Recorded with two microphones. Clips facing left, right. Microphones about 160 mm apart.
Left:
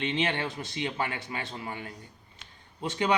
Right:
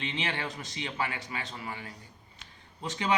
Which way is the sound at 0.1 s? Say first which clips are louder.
Left 5 dB; 25° left (ahead or behind).